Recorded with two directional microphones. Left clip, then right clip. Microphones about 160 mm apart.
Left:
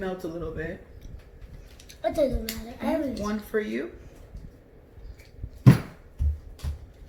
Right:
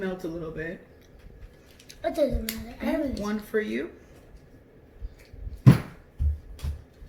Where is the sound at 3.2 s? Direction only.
30° right (ahead or behind).